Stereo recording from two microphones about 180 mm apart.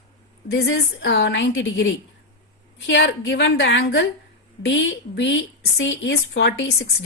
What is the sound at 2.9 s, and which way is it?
A woman's voice, 90° left.